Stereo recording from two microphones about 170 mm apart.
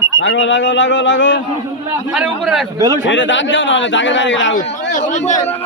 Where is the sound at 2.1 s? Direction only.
5° right (ahead or behind).